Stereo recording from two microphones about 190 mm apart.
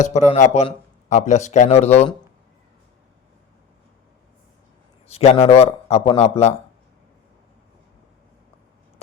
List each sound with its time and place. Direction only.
0.0 s a man's voice: 40° left (ahead or behind)
5.0 s a man's voice: 35° left (ahead or behind)